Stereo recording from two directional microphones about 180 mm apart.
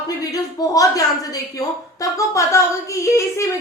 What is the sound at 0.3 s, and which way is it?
A woman's voice, 20° left (ahead or behind).